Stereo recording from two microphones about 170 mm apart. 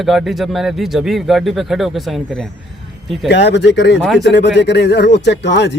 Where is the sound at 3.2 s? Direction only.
90° left.